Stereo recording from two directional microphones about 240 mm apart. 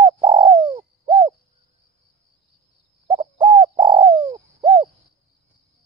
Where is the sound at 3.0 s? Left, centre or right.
Right.